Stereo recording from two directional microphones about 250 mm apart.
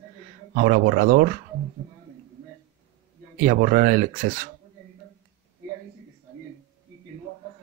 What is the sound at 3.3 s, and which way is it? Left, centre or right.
Speech, right.